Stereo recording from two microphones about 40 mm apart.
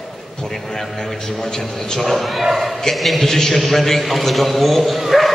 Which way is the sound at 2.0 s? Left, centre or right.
Centre.